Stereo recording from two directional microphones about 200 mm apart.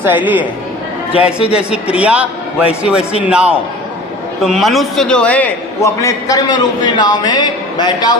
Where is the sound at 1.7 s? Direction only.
5° right (ahead or behind).